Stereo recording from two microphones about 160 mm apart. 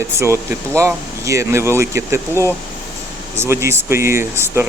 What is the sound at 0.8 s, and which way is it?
Speech, 20° right (ahead or behind).